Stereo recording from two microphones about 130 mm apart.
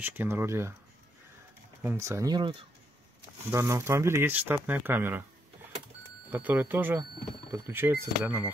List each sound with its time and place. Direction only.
0.0 s speech: 15° right (ahead or behind)
1.8 s speech: 20° right (ahead or behind)
3.4 s speech: 20° right (ahead or behind)
6.3 s speech: 15° right (ahead or behind)